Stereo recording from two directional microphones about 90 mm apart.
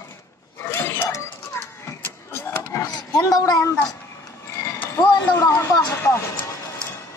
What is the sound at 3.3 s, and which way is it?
Speech, 40° left (ahead or behind).